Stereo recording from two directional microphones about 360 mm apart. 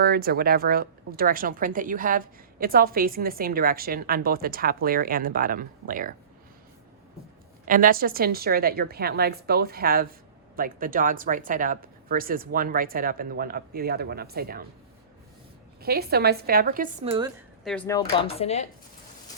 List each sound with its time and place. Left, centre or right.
0.0 s a woman's voice: right
7.6 s a woman's voice: right
15.8 s a woman's voice: right
17.6 s speech: centre